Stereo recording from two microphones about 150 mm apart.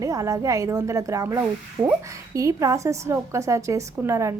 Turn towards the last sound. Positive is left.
turn(degrees=-20)  # may be behind; listen again after turning